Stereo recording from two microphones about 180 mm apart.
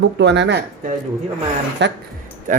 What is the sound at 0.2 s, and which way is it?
Speech, 75° right (ahead or behind).